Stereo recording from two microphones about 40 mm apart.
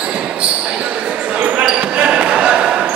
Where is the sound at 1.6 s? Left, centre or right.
Right.